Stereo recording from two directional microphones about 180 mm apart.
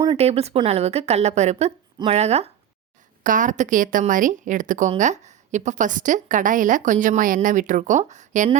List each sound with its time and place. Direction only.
0.2 s a woman's voice: 35° right (ahead or behind)